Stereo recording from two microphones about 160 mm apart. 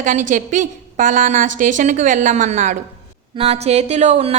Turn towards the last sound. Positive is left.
turn(degrees=-40)  # may be behind; listen again after turning